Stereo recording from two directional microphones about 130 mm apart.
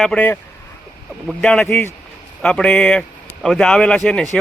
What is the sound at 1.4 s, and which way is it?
A man's voice, 5° left (ahead or behind).